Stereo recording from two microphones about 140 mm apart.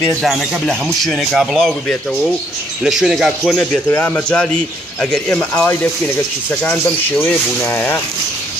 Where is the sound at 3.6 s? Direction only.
10° left (ahead or behind).